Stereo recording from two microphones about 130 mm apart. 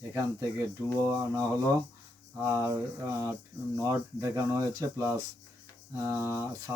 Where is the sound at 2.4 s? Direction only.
25° right (ahead or behind).